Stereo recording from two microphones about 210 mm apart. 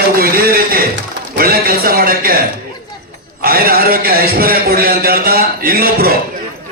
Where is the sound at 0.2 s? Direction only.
45° right (ahead or behind).